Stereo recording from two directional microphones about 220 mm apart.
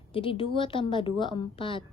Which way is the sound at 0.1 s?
25° left (ahead or behind).